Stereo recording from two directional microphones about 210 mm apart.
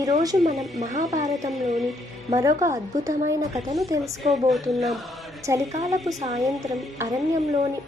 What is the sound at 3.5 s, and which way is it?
Speech, centre (ahead or behind).